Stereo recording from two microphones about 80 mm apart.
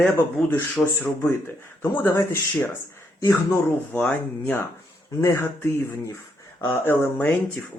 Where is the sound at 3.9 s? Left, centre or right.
Centre.